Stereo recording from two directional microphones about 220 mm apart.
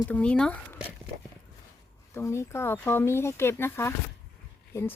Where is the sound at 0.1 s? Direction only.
5° left (ahead or behind).